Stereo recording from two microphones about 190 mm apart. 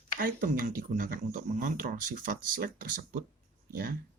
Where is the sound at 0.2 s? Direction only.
45° right (ahead or behind).